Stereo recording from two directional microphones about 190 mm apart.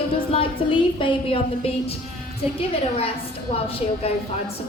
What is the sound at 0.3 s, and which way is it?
A woman's voice, 25° left (ahead or behind).